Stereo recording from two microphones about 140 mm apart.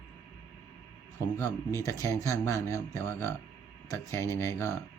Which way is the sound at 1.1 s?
20° left (ahead or behind).